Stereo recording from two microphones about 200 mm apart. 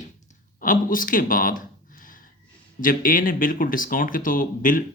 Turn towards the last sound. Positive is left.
turn(degrees=45)  # may be behind; listen again after turning